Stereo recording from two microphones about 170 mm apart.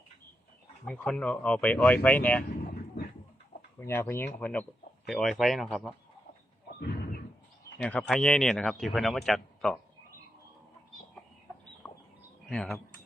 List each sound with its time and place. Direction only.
0.9 s speech: 5° left (ahead or behind)
3.8 s speech: 15° left (ahead or behind)
6.7 s a sound: 70° left (ahead or behind)
7.8 s speech: 5° left (ahead or behind)
11.8 s bird: 10° left (ahead or behind)
12.5 s speech: 5° left (ahead or behind)